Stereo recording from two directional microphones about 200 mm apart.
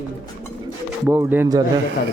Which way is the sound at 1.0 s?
10° right (ahead or behind).